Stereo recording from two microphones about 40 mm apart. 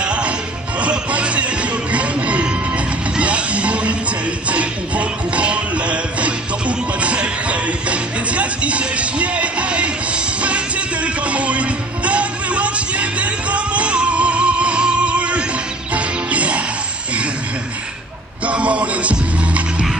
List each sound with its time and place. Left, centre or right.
0.0 s music: right
18.4 s music: right